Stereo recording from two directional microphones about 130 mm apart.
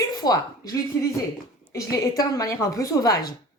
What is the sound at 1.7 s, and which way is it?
Speech, 25° left (ahead or behind).